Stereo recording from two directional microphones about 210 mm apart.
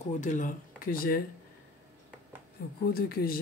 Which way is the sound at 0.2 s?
35° left (ahead or behind).